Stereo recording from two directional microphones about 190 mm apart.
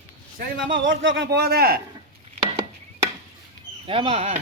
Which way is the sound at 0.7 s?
80° right.